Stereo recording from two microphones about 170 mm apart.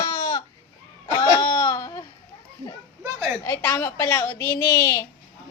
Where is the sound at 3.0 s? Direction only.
10° right (ahead or behind).